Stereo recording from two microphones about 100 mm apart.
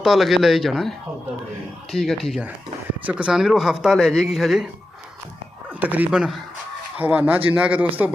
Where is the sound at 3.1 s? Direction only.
10° right (ahead or behind).